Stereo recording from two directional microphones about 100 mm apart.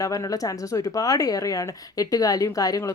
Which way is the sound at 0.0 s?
35° left (ahead or behind).